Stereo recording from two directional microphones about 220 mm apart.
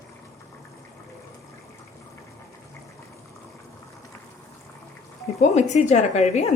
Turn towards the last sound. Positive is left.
turn(degrees=30)  # may be behind; listen again after turning